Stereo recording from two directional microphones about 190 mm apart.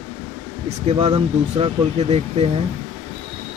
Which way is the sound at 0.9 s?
25° right (ahead or behind).